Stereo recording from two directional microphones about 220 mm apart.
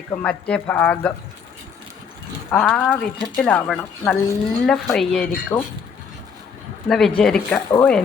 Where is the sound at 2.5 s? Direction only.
5° left (ahead or behind).